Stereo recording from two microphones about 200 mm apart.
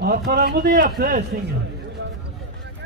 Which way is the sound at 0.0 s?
55° right (ahead or behind).